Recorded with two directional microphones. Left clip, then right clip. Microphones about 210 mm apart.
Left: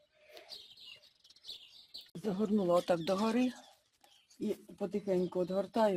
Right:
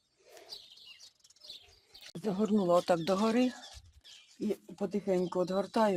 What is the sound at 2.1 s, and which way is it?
Speech, 20° right (ahead or behind).